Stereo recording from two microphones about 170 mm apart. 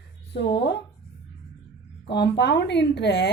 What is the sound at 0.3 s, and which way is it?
Speech, 90° left.